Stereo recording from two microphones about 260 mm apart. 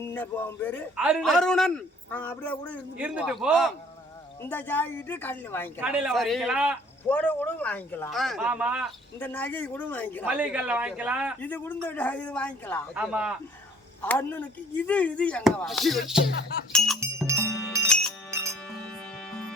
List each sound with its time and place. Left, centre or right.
0.0 s a man's voice: centre
0.9 s speech: centre
3.0 s speech: centre
5.8 s speech: centre
9.1 s speech: centre
10.2 s speech: centre
11.3 s speech: centre
12.9 s speech: centre
14.0 s speech: centre
17.0 s music: centre
19.3 s music: centre